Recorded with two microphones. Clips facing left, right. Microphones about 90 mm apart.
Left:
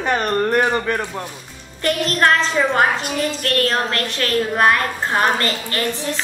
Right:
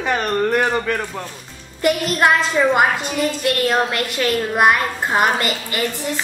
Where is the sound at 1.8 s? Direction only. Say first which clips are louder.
Right 1 dB; 10° right (ahead or behind).